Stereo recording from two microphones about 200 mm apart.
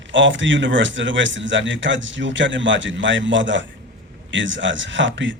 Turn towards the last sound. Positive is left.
turn(degrees=-65)  # may be behind; listen again after turning